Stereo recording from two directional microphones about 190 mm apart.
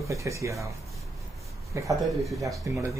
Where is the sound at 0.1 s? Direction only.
15° right (ahead or behind).